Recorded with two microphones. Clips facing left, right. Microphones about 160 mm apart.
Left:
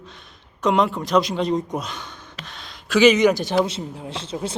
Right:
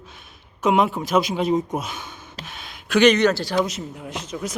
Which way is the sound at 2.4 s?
5° right (ahead or behind).